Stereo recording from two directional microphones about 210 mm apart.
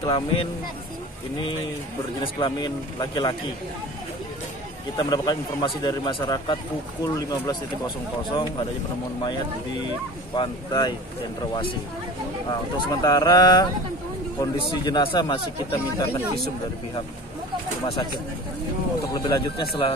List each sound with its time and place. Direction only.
0.0 s speech: 20° left (ahead or behind)
2.2 s speech: 20° left (ahead or behind)
4.9 s speech: 20° left (ahead or behind)
10.3 s speech: 20° left (ahead or behind)
12.4 s speech: 20° left (ahead or behind)
19.1 s speech: 20° left (ahead or behind)